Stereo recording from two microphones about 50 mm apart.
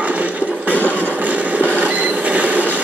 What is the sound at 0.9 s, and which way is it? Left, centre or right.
Train, right.